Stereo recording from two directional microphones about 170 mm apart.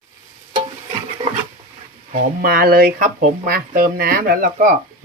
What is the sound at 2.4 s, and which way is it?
Speech, 60° right (ahead or behind).